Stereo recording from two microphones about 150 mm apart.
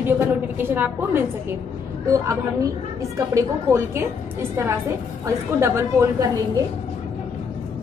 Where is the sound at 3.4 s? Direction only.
15° right (ahead or behind).